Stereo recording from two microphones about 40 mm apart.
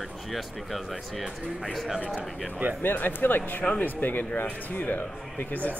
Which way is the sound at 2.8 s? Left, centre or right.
Left.